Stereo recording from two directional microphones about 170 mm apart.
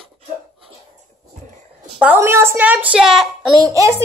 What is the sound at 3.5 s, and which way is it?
Speech, 20° right (ahead or behind).